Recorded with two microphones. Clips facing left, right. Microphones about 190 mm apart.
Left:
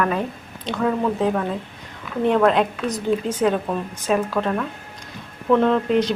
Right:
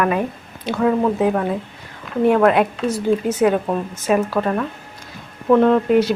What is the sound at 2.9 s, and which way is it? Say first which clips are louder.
Speech: right 3 dB; 15° left (ahead or behind).